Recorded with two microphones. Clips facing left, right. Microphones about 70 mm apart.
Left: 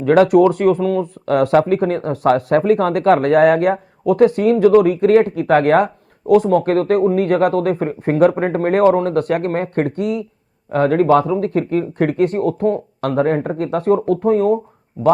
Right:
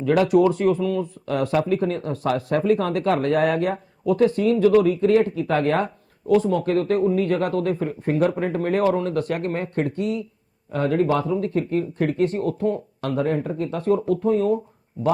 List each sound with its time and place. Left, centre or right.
0.0 s speech: left